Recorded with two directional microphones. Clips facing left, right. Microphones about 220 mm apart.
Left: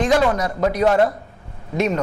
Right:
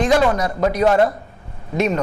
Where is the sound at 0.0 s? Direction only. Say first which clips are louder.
Right 1 dB; 25° right (ahead or behind).